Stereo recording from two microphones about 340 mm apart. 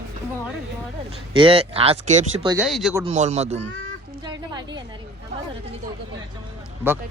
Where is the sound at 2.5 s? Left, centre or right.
Centre.